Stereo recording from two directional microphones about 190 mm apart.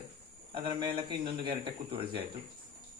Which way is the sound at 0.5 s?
30° right (ahead or behind).